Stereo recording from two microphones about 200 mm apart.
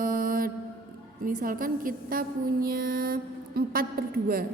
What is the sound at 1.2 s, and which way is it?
A woman's voice, 45° right (ahead or behind).